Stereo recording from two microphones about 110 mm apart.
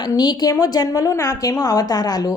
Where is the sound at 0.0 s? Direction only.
40° left (ahead or behind).